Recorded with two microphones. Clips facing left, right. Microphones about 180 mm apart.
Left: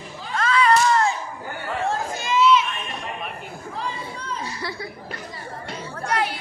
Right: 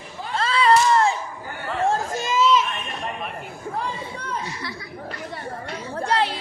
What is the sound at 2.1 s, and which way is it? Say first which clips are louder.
Chatter: left 4 dB; 45° right (ahead or behind).